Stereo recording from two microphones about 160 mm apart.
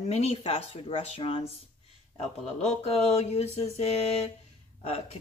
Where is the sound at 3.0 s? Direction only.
40° left (ahead or behind).